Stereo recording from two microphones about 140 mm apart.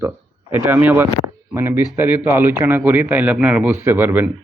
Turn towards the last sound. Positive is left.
turn(degrees=-15)  # may be behind; listen again after turning